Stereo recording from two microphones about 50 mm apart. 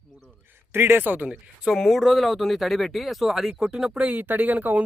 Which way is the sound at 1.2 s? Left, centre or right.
Centre.